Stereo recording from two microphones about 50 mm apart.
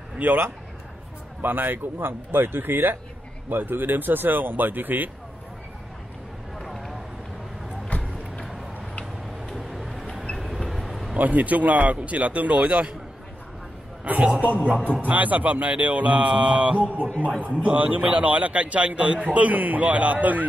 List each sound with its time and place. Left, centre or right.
1.4 s speech: right
6.6 s run: centre
9.6 s vehicle: centre
11.1 s speech: right
14.0 s speech: right
14.7 s speech: centre
15.0 s speech: right